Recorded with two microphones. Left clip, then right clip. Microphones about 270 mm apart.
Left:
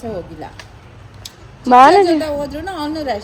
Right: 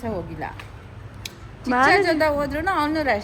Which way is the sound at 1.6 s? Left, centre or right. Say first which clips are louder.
Left 10 dB; centre.